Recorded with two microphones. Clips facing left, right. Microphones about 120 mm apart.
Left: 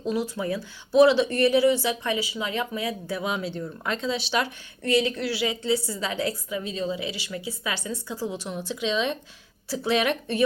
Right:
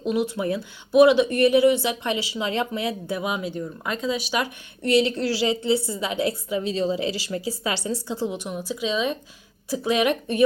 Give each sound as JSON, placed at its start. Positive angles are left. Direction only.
{"t": 0.0, "sound": "speech", "side_deg": -20}
{"t": 3.2, "sound": "speech", "side_deg": -10}
{"t": 4.9, "sound": "a woman's voice", "side_deg": -30}
{"t": 8.3, "sound": "speech", "side_deg": -10}